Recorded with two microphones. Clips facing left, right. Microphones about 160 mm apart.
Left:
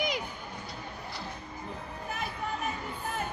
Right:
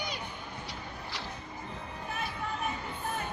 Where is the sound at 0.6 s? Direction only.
90° right.